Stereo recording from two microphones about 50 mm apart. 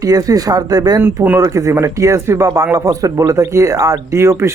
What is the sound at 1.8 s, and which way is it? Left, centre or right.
Speech, right.